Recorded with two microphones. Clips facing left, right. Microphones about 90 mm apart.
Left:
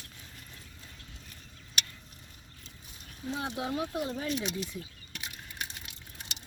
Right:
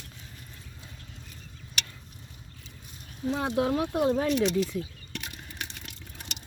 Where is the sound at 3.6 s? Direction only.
55° right (ahead or behind).